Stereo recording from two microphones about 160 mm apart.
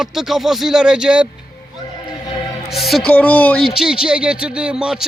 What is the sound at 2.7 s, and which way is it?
Music, centre (ahead or behind).